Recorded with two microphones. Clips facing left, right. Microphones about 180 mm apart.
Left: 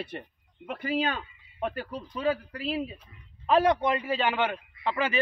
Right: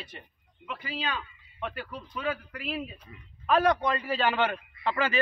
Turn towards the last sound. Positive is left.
turn(degrees=15)  # may be behind; listen again after turning